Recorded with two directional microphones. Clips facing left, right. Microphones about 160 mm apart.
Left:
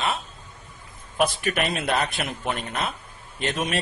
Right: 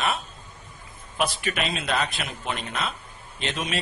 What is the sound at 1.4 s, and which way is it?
A man's voice, 45° left (ahead or behind).